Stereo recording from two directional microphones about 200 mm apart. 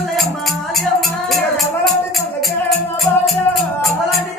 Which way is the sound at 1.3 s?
Centre (ahead or behind).